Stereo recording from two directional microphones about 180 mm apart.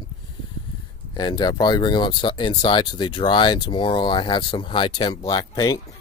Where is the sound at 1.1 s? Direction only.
25° left (ahead or behind).